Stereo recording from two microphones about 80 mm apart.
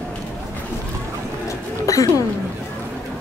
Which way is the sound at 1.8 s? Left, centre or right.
Left.